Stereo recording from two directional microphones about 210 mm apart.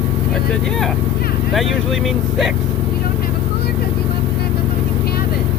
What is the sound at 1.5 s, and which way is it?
Speech, centre (ahead or behind).